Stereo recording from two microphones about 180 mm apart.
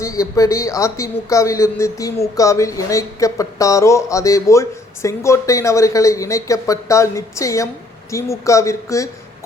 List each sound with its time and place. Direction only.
0.0 s speech: 15° left (ahead or behind)